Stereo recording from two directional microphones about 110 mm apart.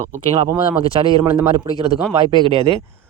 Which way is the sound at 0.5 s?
45° right (ahead or behind).